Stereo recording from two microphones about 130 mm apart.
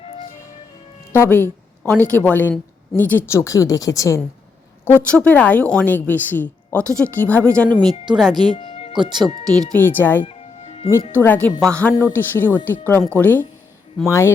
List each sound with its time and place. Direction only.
1.1 s a woman's voice: 15° left (ahead or behind)
4.9 s a woman's voice: 15° left (ahead or behind)
7.7 s speech: 35° right (ahead or behind)
8.5 s music: 45° left (ahead or behind)
8.9 s speech: 35° right (ahead or behind)
9.7 s a woman's voice: 15° left (ahead or behind)
10.2 s music: 50° left (ahead or behind)
11.1 s a woman's voice: 15° left (ahead or behind)